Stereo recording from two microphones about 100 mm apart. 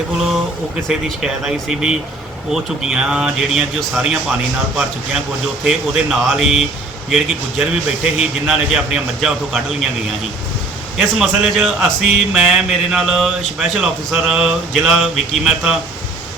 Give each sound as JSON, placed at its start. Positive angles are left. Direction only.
{"t": 0.9, "sound": "speech", "side_deg": -5}
{"t": 5.6, "sound": "speech", "side_deg": -5}
{"t": 10.9, "sound": "speech", "side_deg": -5}